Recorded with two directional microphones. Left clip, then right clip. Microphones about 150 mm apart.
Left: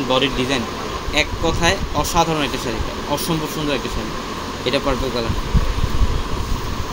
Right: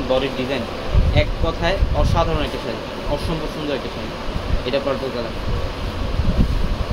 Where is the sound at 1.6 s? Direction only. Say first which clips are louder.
Left 2 dB; 90° left.